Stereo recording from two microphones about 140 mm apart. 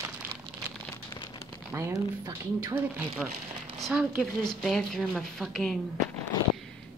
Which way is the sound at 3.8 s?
5° right (ahead or behind).